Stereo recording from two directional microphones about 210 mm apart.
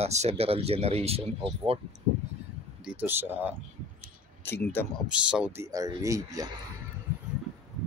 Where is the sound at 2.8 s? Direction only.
5° right (ahead or behind).